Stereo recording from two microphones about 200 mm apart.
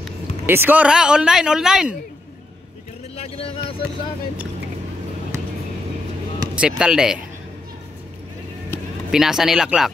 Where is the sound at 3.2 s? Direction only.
30° left (ahead or behind).